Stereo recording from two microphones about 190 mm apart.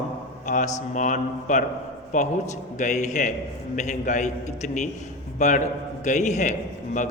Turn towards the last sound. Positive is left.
turn(degrees=40)  # may be behind; listen again after turning